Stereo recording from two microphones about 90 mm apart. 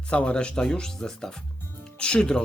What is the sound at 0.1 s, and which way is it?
A man's voice, 10° left (ahead or behind).